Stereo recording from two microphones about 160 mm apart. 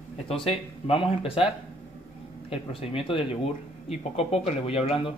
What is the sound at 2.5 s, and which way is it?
A man's voice, 35° left (ahead or behind).